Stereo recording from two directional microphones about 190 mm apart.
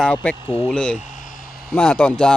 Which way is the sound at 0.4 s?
30° left (ahead or behind).